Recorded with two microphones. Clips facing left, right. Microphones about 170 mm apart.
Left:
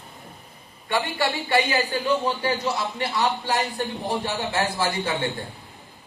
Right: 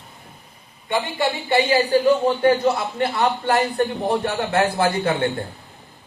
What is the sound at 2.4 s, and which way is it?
A man's voice, 55° right (ahead or behind).